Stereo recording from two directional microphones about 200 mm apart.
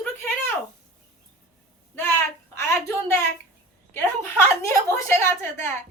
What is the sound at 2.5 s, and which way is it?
A woman's voice, 10° left (ahead or behind).